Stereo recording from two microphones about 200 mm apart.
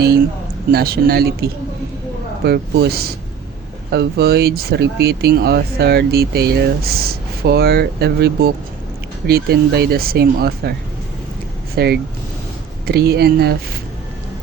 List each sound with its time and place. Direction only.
0.7 s speech: 50° right (ahead or behind)